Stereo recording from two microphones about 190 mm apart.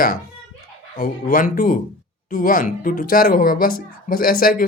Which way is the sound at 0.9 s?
45° left (ahead or behind).